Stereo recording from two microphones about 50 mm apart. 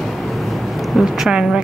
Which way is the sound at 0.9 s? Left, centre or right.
Centre.